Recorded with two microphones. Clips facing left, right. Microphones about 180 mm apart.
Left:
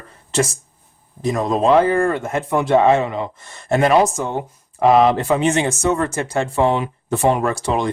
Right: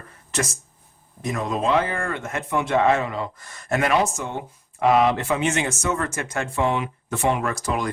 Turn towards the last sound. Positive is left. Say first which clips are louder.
# left 5 dB
turn(degrees=30)  # may be behind; listen again after turning